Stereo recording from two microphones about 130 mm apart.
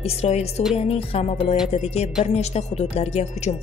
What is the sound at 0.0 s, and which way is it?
A woman's voice, 55° left (ahead or behind).